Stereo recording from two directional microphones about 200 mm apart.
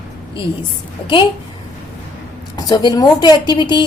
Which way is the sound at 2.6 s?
20° left (ahead or behind).